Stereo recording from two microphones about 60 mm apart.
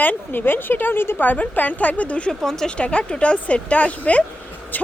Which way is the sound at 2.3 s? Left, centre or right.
Centre.